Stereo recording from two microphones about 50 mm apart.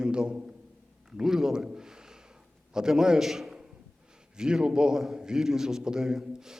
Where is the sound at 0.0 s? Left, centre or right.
Centre.